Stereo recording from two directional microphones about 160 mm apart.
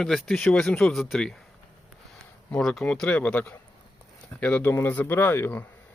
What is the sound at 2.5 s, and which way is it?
Speech, centre (ahead or behind).